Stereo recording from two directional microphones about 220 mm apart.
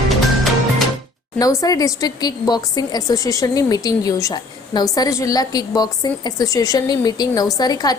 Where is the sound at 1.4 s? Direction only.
15° left (ahead or behind).